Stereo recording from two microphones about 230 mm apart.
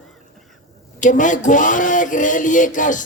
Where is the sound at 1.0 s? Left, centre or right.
Left.